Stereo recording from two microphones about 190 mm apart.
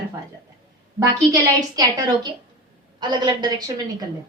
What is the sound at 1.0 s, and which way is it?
A woman's voice, 20° right (ahead or behind).